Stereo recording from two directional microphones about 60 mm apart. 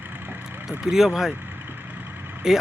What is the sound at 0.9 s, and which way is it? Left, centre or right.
Speech, centre.